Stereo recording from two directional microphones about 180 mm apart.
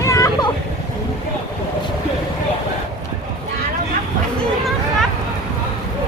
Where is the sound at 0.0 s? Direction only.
20° left (ahead or behind).